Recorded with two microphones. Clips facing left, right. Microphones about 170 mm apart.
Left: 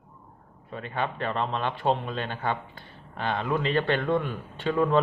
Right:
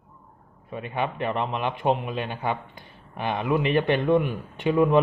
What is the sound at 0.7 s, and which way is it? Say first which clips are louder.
A man's voice: right 2 dB; 15° right (ahead or behind).